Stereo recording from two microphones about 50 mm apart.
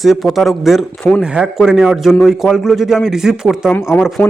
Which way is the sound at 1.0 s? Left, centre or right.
Left.